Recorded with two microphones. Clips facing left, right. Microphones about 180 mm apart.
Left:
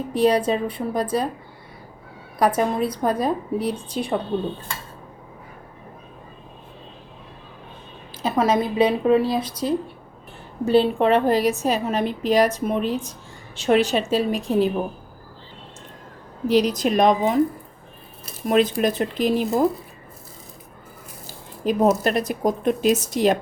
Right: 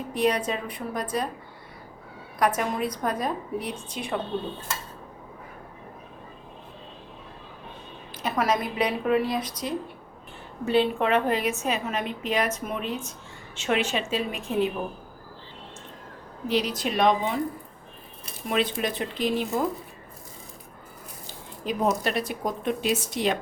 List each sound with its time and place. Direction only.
0.1 s a woman's voice: 30° left (ahead or behind)
2.4 s a woman's voice: 35° left (ahead or behind)
8.2 s a woman's voice: 25° left (ahead or behind)
16.5 s a woman's voice: 40° left (ahead or behind)
18.4 s a woman's voice: 40° left (ahead or behind)
21.6 s a woman's voice: 45° left (ahead or behind)